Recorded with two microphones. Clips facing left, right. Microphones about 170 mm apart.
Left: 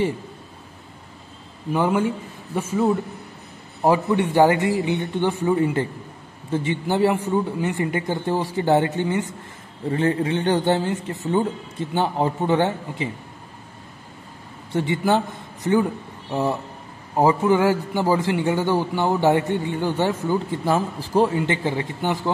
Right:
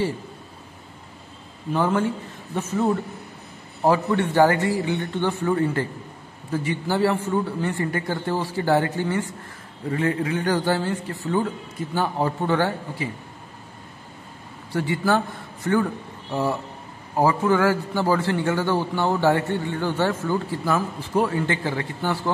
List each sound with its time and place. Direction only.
1.7 s a man's voice: 15° left (ahead or behind)
3.8 s a man's voice: 15° left (ahead or behind)
9.8 s a man's voice: 30° left (ahead or behind)
14.7 s a man's voice: 20° left (ahead or behind)
20.6 s a man's voice: 30° left (ahead or behind)